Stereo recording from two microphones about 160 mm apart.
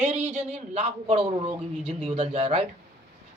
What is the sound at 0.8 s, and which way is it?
A man's voice, 35° right (ahead or behind).